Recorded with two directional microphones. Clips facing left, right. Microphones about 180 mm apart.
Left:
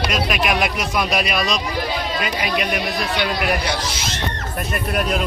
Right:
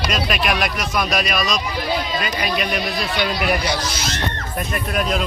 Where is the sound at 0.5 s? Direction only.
20° left (ahead or behind).